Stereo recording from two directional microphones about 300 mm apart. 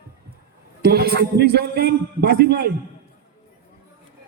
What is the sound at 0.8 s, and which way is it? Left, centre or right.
A man's voice, right.